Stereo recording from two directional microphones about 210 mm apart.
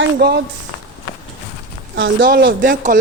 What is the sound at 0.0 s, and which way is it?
Speech, 50° right (ahead or behind).